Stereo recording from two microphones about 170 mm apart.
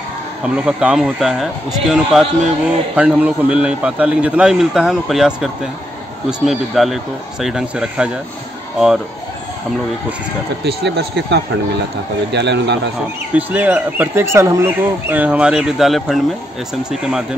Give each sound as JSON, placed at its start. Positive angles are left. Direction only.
{"t": 0.7, "sound": "a man's voice", "side_deg": -5}
{"t": 10.6, "sound": "speech", "side_deg": -75}
{"t": 13.3, "sound": "speech", "side_deg": -10}